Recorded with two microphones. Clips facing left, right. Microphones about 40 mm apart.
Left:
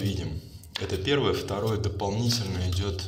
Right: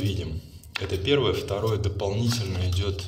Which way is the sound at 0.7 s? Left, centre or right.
Right.